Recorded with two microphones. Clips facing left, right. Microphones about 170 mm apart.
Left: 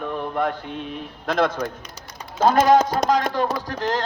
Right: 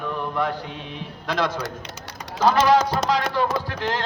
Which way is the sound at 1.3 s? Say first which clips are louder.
Left 3 dB; 50° left (ahead or behind).